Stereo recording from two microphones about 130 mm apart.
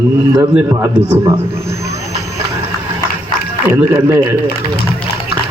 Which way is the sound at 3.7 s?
15° right (ahead or behind).